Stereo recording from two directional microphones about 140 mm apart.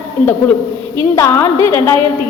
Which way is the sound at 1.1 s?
20° left (ahead or behind).